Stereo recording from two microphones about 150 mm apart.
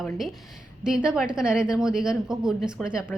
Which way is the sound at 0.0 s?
Centre (ahead or behind).